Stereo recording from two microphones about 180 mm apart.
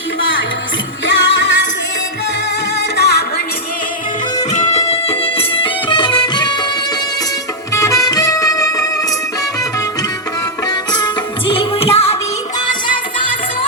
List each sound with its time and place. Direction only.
0.2 s music: 90° left
2.7 s music: 65° left (ahead or behind)
5.0 s music: 30° left (ahead or behind)
7.7 s music: 20° left (ahead or behind)
11.0 s music: 30° left (ahead or behind)